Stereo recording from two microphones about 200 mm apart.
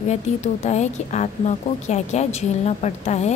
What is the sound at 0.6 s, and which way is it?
A woman's voice, 35° left (ahead or behind).